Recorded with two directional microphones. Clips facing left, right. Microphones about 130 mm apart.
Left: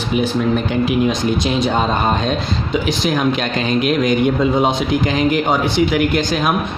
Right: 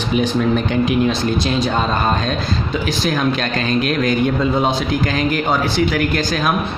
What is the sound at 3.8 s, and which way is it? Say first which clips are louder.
Speech: left 3 dB; 15° left (ahead or behind).